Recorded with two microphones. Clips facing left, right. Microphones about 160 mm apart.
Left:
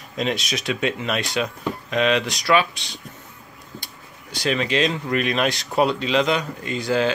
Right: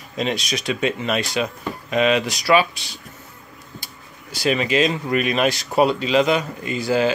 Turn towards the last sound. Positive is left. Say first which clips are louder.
# right 2 dB
turn(degrees=-5)  # may be behind; listen again after turning